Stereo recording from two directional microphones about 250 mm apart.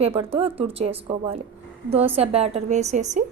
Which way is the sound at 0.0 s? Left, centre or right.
Right.